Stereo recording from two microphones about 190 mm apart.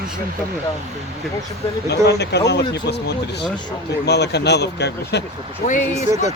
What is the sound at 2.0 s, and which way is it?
Speech, 60° left (ahead or behind).